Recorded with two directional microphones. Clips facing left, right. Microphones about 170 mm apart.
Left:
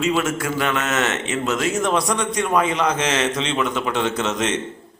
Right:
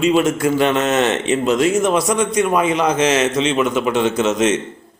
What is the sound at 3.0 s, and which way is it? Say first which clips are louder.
Speech: right 6 dB; 25° right (ahead or behind).